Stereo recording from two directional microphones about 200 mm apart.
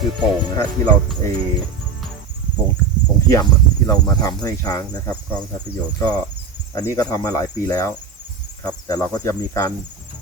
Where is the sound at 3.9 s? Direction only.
20° left (ahead or behind).